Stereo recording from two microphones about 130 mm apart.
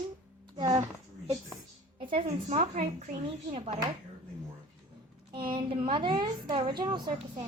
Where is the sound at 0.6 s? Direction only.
35° right (ahead or behind).